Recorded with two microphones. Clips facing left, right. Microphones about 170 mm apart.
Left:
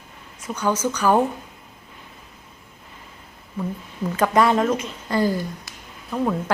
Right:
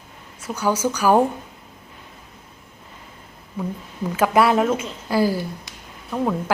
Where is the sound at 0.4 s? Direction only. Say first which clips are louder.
Right 1 dB; 10° right (ahead or behind).